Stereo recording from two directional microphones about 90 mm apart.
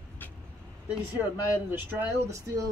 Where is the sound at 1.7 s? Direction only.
25° right (ahead or behind).